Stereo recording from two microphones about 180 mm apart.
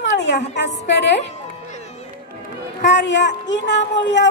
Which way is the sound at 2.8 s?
80° left.